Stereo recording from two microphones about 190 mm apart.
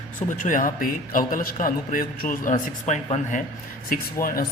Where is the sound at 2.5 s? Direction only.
35° left (ahead or behind).